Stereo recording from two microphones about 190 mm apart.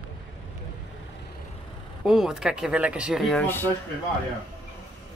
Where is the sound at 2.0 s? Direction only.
5° right (ahead or behind).